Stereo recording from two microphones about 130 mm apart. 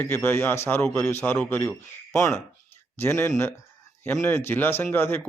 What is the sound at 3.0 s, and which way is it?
Speech, 15° left (ahead or behind).